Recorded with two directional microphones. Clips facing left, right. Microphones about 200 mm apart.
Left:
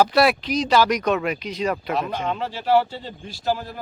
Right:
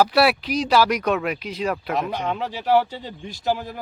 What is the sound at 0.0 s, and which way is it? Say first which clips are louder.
Speech: even; 5° right (ahead or behind).